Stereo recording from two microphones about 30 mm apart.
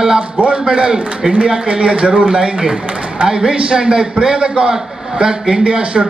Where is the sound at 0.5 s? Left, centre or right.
Right.